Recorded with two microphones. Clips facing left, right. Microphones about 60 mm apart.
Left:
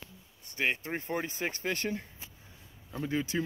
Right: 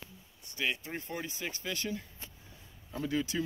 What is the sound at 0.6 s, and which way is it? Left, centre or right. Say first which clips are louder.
Speech: left 3 dB; left.